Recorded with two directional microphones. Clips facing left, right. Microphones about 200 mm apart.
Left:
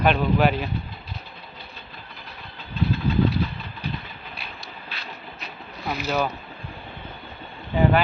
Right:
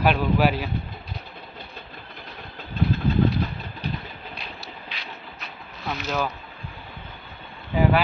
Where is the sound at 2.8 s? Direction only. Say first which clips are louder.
Right 1 dB; 50° right (ahead or behind).